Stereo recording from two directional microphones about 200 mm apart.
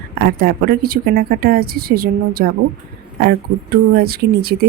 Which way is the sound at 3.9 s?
50° right (ahead or behind).